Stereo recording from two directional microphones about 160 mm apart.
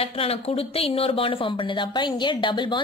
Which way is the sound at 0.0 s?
40° left (ahead or behind).